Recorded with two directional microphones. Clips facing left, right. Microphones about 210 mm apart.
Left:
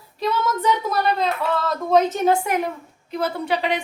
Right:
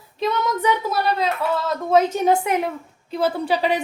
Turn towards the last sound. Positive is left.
turn(degrees=-40)  # may be behind; listen again after turning